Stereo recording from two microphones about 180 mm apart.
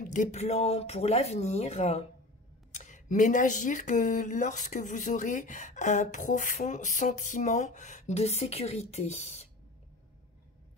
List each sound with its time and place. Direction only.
0.0 s speech: 45° left (ahead or behind)